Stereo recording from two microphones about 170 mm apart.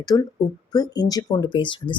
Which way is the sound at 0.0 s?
20° left (ahead or behind).